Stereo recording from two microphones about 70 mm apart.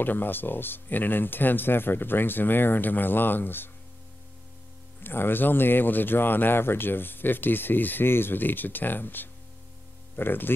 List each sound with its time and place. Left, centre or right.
0.0 s speech: left
5.0 s speech: left